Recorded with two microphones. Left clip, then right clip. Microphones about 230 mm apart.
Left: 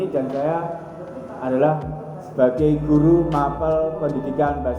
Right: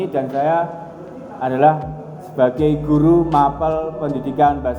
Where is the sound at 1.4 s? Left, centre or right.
Right.